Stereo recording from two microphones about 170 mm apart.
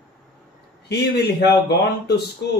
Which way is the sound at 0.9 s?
75° left (ahead or behind).